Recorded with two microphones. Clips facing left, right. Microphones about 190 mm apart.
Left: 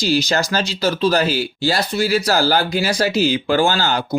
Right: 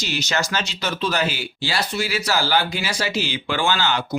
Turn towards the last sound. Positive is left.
turn(degrees=40)  # may be behind; listen again after turning